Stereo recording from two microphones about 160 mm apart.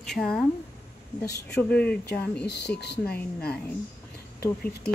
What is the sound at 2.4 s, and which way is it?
Speech, 90° left.